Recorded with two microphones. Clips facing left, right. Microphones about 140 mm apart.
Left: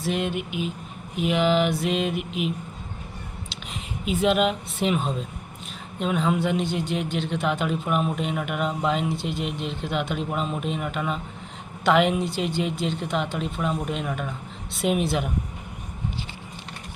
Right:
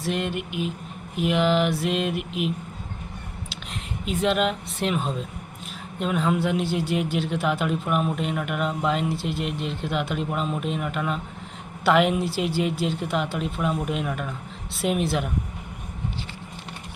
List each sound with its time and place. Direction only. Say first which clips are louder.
0.0 s a man's voice: left 1 dB; centre (ahead or behind)
4.0 s a man's voice: left 2 dB; 5° left (ahead or behind)